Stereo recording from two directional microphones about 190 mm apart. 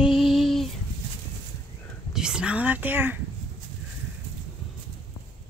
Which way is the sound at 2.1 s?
5° right (ahead or behind).